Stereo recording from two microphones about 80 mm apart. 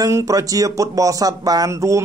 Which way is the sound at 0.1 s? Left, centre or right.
Right.